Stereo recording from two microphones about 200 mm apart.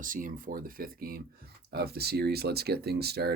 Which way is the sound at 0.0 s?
40° right (ahead or behind).